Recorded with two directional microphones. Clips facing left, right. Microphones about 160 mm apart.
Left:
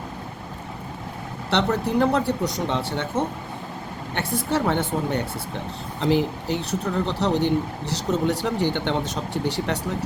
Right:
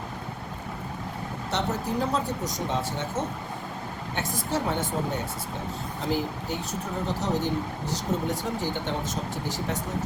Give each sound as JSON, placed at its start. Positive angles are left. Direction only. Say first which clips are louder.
{"t": 1.5, "sound": "a woman's voice", "louder": "left 6 dB", "side_deg": 70}
{"t": 6.0, "sound": "speech", "louder": "left 8 dB", "side_deg": 75}